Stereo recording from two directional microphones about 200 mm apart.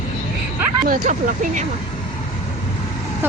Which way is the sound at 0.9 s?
45° right (ahead or behind).